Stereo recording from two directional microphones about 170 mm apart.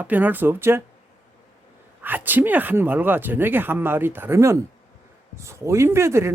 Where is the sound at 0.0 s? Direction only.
10° right (ahead or behind).